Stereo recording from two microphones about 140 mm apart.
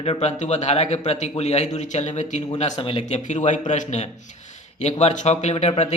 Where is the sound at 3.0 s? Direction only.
60° left (ahead or behind).